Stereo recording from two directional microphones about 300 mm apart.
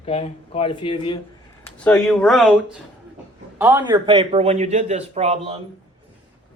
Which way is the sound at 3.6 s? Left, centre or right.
Centre.